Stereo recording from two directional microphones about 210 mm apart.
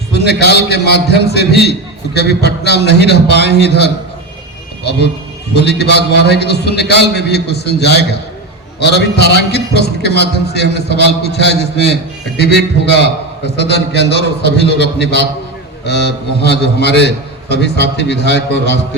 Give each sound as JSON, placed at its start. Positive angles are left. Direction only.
{"t": 0.1, "sound": "a man's voice", "side_deg": 50}